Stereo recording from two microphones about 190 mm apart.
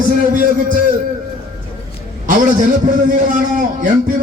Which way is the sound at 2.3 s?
45° right (ahead or behind).